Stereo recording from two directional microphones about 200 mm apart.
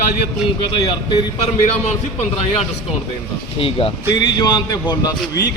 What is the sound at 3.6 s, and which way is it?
Speech, 25° left (ahead or behind).